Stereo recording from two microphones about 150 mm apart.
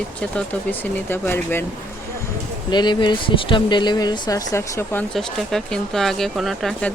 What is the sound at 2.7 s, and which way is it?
Speech, 30° left (ahead or behind).